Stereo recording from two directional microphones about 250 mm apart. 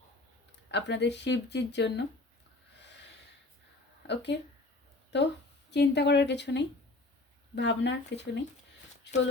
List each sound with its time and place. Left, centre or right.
0.7 s speech: left
4.0 s a woman's voice: left